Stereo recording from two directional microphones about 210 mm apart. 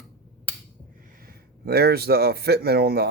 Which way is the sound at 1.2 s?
45° right (ahead or behind).